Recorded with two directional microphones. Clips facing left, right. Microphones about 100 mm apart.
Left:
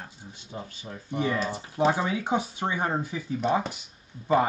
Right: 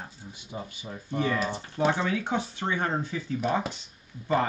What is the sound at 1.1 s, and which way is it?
Speech, 15° left (ahead or behind).